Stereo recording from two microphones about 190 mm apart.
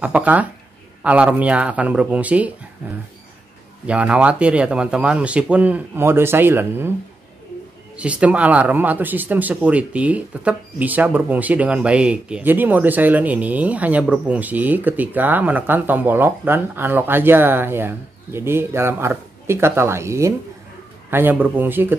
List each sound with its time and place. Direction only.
0.0 s speech: 10° right (ahead or behind)
3.8 s speech: 5° right (ahead or behind)
7.9 s speech: 5° right (ahead or behind)